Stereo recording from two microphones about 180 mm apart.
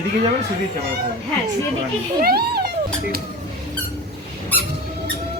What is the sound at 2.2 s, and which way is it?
Cat, 60° right (ahead or behind).